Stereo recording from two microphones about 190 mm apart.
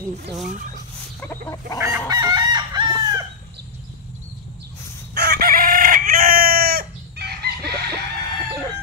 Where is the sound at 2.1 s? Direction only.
20° right (ahead or behind).